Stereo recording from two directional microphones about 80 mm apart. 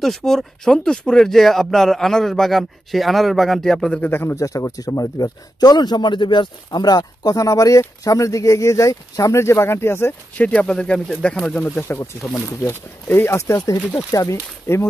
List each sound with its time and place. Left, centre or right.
0.0 s speech: centre
4.0 s speech: left
4.4 s a man's voice: left
10.3 s speech: centre
11.6 s speech: left